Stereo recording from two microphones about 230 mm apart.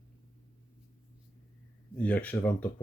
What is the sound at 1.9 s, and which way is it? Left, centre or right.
Speech, centre.